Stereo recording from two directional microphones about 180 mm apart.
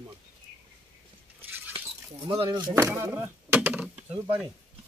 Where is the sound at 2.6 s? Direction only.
10° right (ahead or behind).